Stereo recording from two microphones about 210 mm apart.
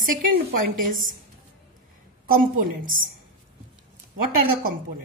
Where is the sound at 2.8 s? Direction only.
40° right (ahead or behind).